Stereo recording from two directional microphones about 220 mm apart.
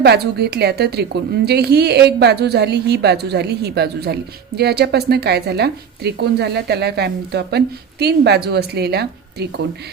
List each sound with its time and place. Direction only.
0.0 s a woman's voice: 45° right (ahead or behind)